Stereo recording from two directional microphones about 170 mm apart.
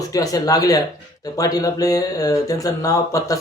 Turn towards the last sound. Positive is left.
turn(degrees=20)  # may be behind; listen again after turning